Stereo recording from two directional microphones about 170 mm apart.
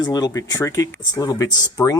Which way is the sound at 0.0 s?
20° left (ahead or behind).